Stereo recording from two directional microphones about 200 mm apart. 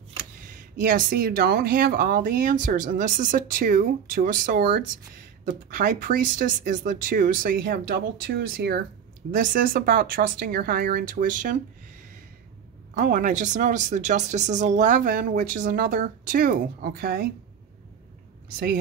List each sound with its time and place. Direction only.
0.2 s speech: 40° right (ahead or behind)
12.9 s speech: 40° right (ahead or behind)